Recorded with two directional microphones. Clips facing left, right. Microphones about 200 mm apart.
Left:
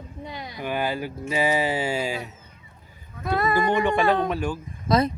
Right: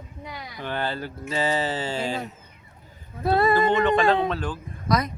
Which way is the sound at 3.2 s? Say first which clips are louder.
Right 4 dB; 30° right (ahead or behind).